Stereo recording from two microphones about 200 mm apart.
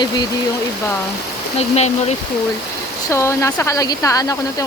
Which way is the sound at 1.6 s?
30° left (ahead or behind).